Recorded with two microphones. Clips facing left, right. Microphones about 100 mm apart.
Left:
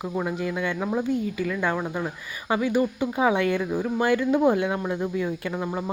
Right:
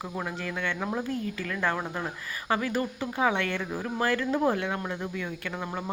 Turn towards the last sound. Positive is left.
turn(degrees=15)  # may be behind; listen again after turning